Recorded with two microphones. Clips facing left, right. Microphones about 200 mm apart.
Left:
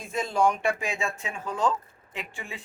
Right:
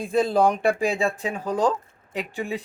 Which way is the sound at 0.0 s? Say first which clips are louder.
Right 5 dB; 35° right (ahead or behind).